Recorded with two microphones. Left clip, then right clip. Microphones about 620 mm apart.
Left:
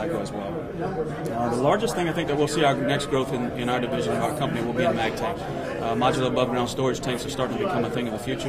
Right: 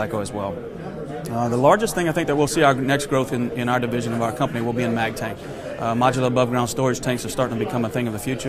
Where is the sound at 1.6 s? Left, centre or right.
Right.